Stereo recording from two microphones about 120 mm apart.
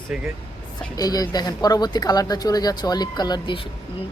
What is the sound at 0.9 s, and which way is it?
Speech, 30° left (ahead or behind).